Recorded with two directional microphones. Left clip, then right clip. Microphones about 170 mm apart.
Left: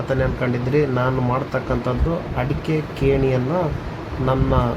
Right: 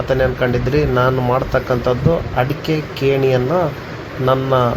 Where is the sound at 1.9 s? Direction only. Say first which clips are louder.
Right 7 dB; 15° right (ahead or behind).